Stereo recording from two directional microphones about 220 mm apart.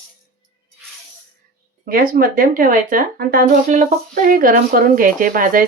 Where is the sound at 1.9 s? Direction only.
40° right (ahead or behind).